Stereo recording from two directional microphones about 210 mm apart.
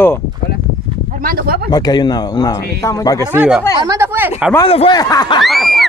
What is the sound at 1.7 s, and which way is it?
A man's voice, 20° left (ahead or behind).